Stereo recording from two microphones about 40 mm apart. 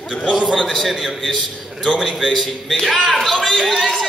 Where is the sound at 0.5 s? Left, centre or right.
Centre.